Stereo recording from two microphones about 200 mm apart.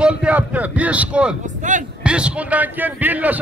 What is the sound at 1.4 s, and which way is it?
Speech, 40° right (ahead or behind).